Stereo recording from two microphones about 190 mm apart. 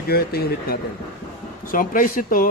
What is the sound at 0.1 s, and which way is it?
Speech, 55° left (ahead or behind).